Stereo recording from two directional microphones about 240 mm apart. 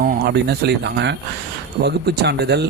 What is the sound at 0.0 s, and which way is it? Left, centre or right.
A man's voice, right.